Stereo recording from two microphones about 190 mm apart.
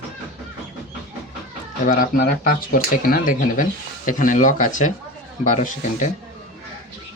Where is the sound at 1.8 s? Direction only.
50° left (ahead or behind).